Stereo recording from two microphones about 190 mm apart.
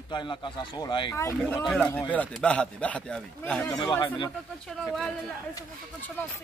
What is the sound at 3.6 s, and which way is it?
Speech, 25° left (ahead or behind).